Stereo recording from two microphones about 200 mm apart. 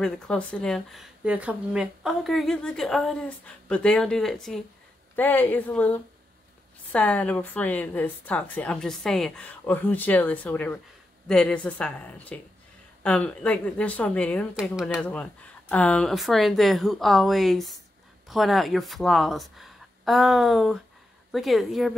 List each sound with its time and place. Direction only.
0.0 s a woman's voice: 5° left (ahead or behind)